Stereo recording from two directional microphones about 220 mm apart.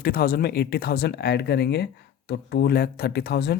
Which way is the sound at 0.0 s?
45° left (ahead or behind).